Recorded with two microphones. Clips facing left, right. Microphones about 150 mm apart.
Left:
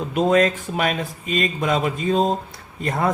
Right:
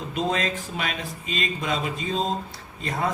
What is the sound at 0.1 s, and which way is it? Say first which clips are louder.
Speech: left 9 dB; 50° left (ahead or behind).